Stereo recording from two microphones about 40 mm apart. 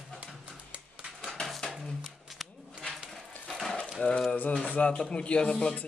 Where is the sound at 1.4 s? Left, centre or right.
Centre.